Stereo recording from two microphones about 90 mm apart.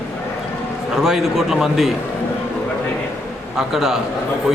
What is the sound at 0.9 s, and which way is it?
Speech, 5° right (ahead or behind).